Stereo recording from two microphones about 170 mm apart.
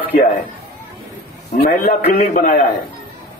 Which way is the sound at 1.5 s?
50° left (ahead or behind).